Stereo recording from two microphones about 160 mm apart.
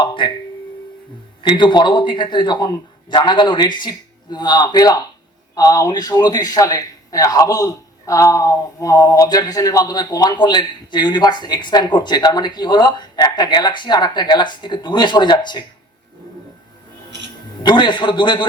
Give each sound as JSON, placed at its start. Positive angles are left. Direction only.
{"t": 0.0, "sound": "tuning fork", "side_deg": 30}
{"t": 1.4, "sound": "a man's voice", "side_deg": 30}
{"t": 17.1, "sound": "a sound", "side_deg": -90}
{"t": 17.6, "sound": "a man's voice", "side_deg": 30}